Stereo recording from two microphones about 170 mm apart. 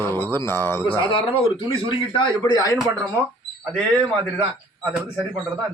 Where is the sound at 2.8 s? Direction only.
10° right (ahead or behind).